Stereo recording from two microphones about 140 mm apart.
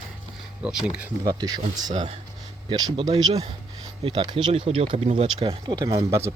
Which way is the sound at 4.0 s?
40° right (ahead or behind).